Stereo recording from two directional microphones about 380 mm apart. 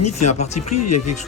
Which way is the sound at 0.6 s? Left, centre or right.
Left.